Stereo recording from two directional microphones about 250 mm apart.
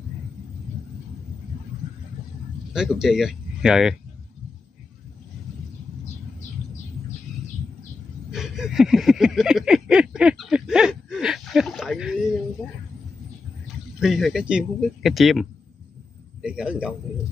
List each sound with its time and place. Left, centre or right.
2.7 s speech: centre
8.3 s a sound: centre
13.9 s speech: centre
16.4 s speech: centre